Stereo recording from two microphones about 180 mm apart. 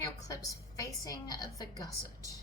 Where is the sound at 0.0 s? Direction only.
20° left (ahead or behind).